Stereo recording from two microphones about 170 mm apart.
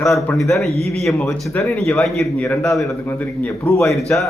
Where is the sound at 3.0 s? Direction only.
10° left (ahead or behind).